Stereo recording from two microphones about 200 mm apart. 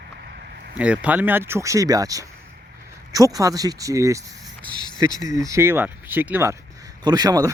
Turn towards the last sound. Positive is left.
turn(degrees=-20)  # may be behind; listen again after turning